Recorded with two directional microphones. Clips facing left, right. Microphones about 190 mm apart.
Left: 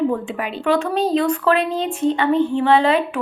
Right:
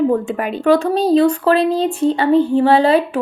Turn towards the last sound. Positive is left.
turn(degrees=-35)  # may be behind; listen again after turning